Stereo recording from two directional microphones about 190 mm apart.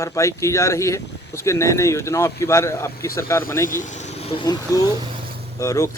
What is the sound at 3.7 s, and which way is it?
Speech, 40° left (ahead or behind).